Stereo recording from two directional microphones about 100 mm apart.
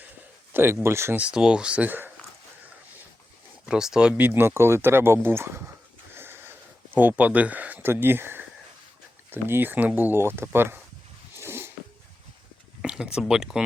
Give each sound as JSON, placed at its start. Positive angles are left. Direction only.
{"t": 0.5, "sound": "speech", "side_deg": -25}
{"t": 1.2, "sound": "speech", "side_deg": -10}
{"t": 3.7, "sound": "speech", "side_deg": -5}
{"t": 6.1, "sound": "a sound", "side_deg": -25}
{"t": 6.9, "sound": "speech", "side_deg": -15}
{"t": 11.3, "sound": "a sound", "side_deg": -25}
{"t": 12.8, "sound": "speech", "side_deg": -10}